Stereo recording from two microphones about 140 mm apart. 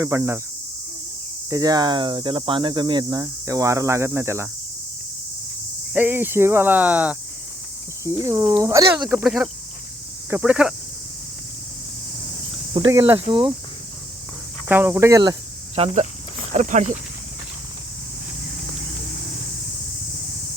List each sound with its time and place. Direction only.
0.0 s speech: 20° right (ahead or behind)
1.5 s speech: 25° right (ahead or behind)
5.9 s speech: 15° right (ahead or behind)
8.0 s speech: 20° right (ahead or behind)
12.7 s speech: 40° right (ahead or behind)
14.7 s speech: 15° right (ahead or behind)
15.7 s speech: 45° right (ahead or behind)
16.6 s speech: 60° right (ahead or behind)